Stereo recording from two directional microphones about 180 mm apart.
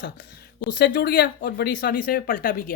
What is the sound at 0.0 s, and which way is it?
Speech, 60° left (ahead or behind).